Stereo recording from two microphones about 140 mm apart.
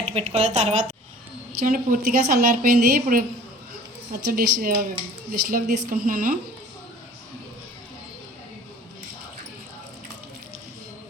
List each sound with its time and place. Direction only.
0.0 s a woman's voice: 50° right (ahead or behind)
1.5 s a woman's voice: 80° right